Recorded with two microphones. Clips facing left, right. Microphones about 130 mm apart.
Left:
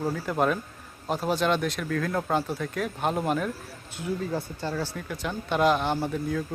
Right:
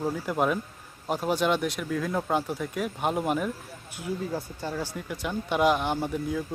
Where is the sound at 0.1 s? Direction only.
10° right (ahead or behind).